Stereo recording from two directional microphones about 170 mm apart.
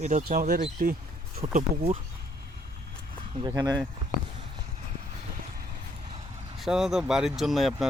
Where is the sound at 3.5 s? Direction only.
20° right (ahead or behind).